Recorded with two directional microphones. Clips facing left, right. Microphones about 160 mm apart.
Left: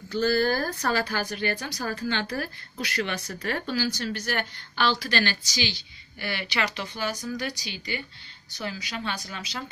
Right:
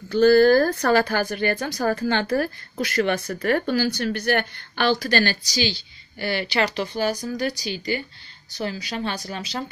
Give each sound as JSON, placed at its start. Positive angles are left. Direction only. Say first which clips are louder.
{"t": 0.1, "sound": "speech", "louder": "right 9 dB", "side_deg": -65}